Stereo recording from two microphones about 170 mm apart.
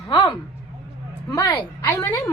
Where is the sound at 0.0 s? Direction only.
20° left (ahead or behind).